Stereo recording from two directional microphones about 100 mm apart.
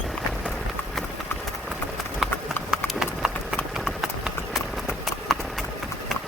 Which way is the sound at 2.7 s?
5° right (ahead or behind).